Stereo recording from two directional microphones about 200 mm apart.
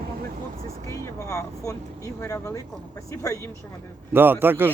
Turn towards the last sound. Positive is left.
turn(degrees=-10)  # may be behind; listen again after turning